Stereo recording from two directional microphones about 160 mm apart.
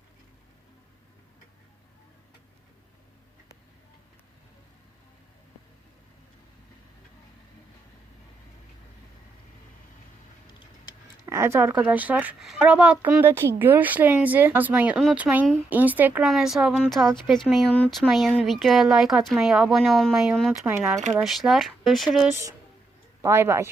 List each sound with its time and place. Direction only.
11.3 s speech: 15° right (ahead or behind); by 20.5 s centre (ahead or behind)
20.5 s speech: 10° right (ahead or behind)
21.1 s speech: 5° right (ahead or behind)
23.2 s speech: 15° right (ahead or behind)